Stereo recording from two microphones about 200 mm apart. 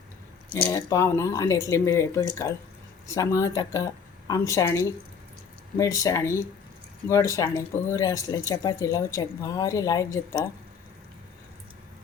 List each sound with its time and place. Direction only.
0.5 s speech: 15° left (ahead or behind)